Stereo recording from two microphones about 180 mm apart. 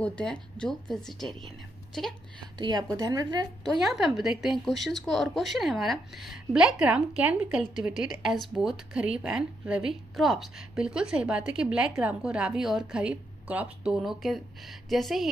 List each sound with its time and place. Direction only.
0.0 s a woman's voice: 5° left (ahead or behind)
2.6 s a woman's voice: 20° right (ahead or behind)
3.8 s a woman's voice: centre (ahead or behind)